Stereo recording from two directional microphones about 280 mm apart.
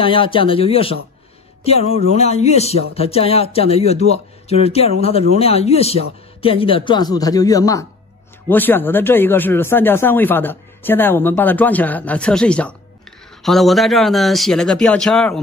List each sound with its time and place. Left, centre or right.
0.0 s speech: centre